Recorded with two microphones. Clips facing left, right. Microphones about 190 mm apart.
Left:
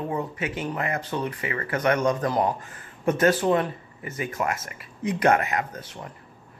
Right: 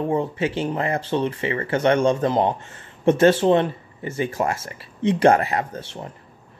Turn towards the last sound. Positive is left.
turn(degrees=-30)  # may be behind; listen again after turning